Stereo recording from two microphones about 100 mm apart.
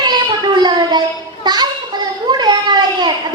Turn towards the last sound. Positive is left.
turn(degrees=-45)  # may be behind; listen again after turning